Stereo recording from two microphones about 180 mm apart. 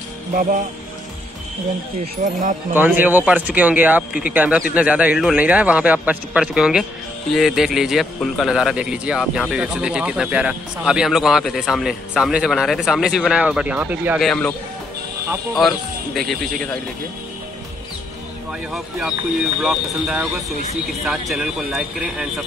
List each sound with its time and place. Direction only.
0.3 s speech: 45° right (ahead or behind)
2.2 s speech: 45° right (ahead or behind)
2.7 s a man's voice: 10° right (ahead or behind)
14.2 s speech: 5° left (ahead or behind)
15.6 s speech: centre (ahead or behind)
18.7 s speech: 5° right (ahead or behind)